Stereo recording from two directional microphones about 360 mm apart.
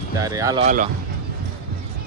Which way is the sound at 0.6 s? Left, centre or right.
Right.